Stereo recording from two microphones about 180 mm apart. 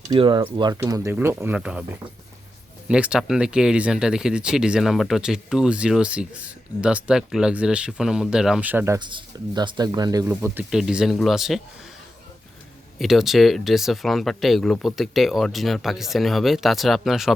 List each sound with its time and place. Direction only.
0.1 s speech: 25° right (ahead or behind)
9.0 s speech: 25° right (ahead or behind); by 11.6 s centre (ahead or behind)
13.0 s speech: centre (ahead or behind)